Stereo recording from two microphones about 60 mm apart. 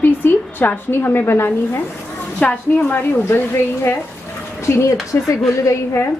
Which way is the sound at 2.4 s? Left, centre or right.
Left.